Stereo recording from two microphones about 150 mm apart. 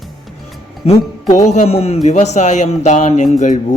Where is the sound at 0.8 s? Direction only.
40° left (ahead or behind).